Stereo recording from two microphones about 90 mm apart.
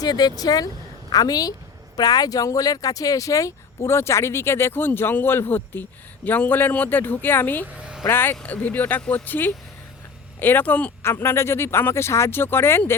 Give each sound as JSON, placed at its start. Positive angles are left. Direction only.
{"t": 0.0, "sound": "speech", "side_deg": 45}
{"t": 7.7, "sound": "a sound", "side_deg": -10}
{"t": 8.0, "sound": "speech", "side_deg": 25}
{"t": 11.0, "sound": "speech", "side_deg": 30}